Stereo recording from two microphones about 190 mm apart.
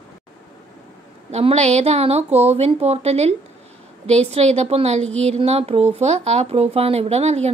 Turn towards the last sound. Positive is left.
turn(degrees=-35)  # may be behind; listen again after turning